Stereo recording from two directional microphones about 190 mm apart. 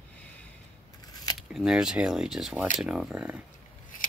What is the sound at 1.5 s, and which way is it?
Speech, 5° right (ahead or behind).